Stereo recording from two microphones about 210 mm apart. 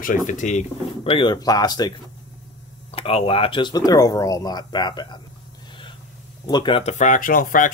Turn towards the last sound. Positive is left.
turn(degrees=40)  # may be behind; listen again after turning